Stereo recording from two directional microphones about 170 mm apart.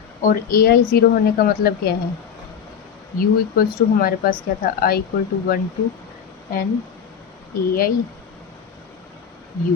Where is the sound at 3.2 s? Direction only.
60° left (ahead or behind).